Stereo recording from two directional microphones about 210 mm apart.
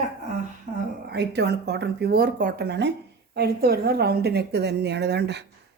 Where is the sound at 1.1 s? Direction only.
55° right (ahead or behind).